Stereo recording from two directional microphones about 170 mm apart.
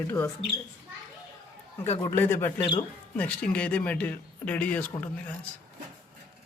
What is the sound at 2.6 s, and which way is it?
Speech, 25° left (ahead or behind).